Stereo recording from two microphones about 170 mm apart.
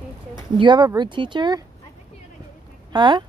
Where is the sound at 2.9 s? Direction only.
30° right (ahead or behind).